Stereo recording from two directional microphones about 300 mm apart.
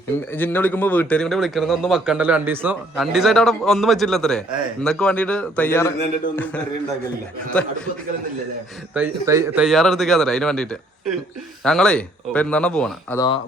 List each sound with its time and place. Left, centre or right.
0.3 s a man's voice: centre
9.0 s a man's voice: centre